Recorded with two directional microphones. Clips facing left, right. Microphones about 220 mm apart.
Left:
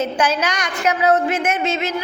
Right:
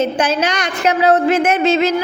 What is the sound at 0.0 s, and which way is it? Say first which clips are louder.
A woman's voice: right 3 dB; 20° right (ahead or behind).